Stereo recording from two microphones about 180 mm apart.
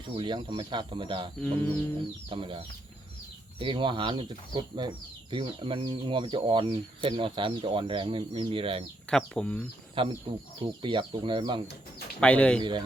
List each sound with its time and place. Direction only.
0.2 s speech: 25° right (ahead or behind)
1.4 s speech: 10° left (ahead or behind)
2.3 s speech: 30° right (ahead or behind)
9.0 s speech: 5° left (ahead or behind)
9.9 s speech: 30° right (ahead or behind)
12.2 s speech: 5° left (ahead or behind)